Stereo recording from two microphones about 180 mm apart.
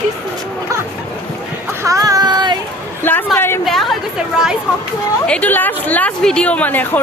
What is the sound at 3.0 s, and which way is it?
Speech, 10° left (ahead or behind).